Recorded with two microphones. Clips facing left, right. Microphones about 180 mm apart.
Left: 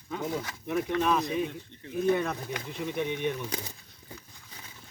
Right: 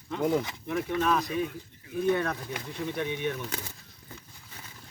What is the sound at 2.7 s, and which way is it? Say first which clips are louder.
Speech: even; 15° left (ahead or behind).